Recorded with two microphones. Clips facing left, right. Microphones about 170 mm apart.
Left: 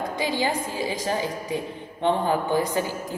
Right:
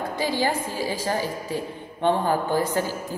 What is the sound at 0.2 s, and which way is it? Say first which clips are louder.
A woman's voice: right 1 dB; 15° left (ahead or behind).